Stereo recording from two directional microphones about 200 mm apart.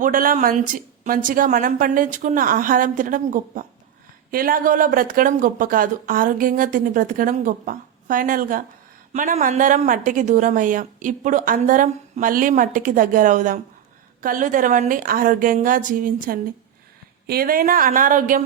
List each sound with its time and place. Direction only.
0.0 s a woman's voice: 45° right (ahead or behind)